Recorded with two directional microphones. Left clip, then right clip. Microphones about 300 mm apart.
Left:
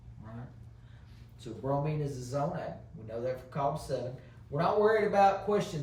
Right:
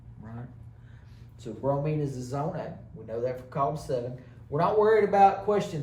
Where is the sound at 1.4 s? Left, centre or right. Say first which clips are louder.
Right 4 dB; centre.